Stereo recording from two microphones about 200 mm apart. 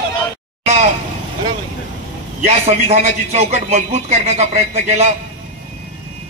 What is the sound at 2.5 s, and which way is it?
A man's voice, 35° right (ahead or behind).